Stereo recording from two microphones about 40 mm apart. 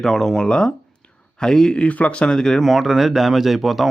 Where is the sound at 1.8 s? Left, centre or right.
Left; by 2.6 s centre.